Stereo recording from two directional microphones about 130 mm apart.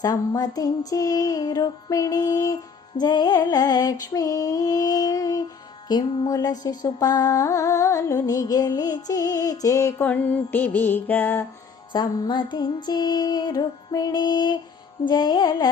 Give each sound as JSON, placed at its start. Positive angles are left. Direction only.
{"t": 0.0, "sound": "music", "side_deg": 30}
{"t": 11.9, "sound": "music", "side_deg": 35}